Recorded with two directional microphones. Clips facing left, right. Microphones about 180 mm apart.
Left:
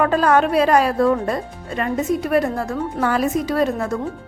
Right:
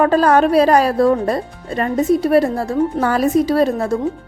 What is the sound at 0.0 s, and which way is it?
A woman's voice, 35° right (ahead or behind).